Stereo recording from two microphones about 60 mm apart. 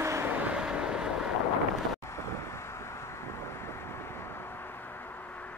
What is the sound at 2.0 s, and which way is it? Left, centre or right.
Vehicle, left.